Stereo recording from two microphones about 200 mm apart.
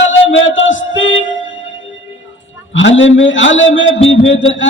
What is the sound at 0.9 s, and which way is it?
Speech, 70° left (ahead or behind).